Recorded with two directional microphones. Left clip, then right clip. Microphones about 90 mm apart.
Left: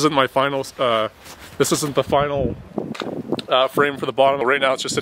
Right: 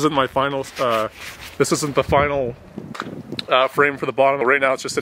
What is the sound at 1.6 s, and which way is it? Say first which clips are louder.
Speech: even; 10° left (ahead or behind).